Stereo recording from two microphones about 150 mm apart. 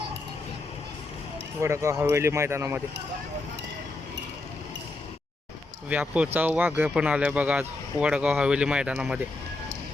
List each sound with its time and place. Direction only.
1.6 s speech: 20° right (ahead or behind)
5.9 s speech: 10° right (ahead or behind)